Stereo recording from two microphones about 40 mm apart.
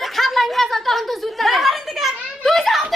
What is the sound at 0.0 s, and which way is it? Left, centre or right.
Snicker, centre.